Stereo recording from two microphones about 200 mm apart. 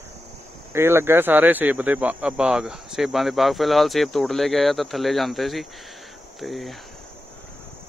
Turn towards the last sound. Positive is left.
turn(degrees=0)  # may be behind; listen again after turning